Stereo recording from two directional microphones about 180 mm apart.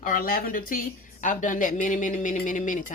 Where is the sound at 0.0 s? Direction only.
50° left (ahead or behind).